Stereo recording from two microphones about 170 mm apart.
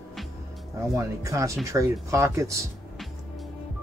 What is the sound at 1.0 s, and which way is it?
Speech, 20° right (ahead or behind).